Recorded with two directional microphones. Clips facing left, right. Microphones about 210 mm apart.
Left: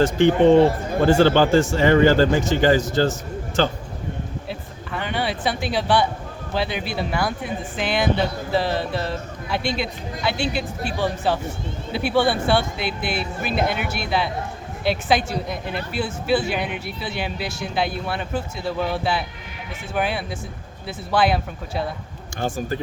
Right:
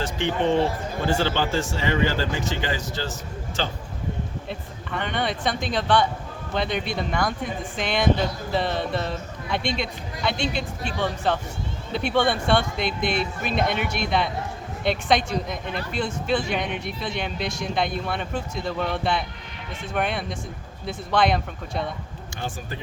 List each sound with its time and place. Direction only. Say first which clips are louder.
0.0 s speech: left 9 dB; 50° left (ahead or behind)
4.4 s speech: left 1 dB; 5° left (ahead or behind)
22.4 s speech: left 8 dB; 45° left (ahead or behind)